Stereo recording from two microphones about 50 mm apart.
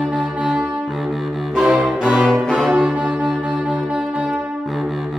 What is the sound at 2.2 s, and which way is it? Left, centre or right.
Music, centre.